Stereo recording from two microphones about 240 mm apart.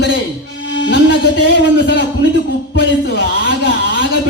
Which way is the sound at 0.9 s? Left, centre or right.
Left.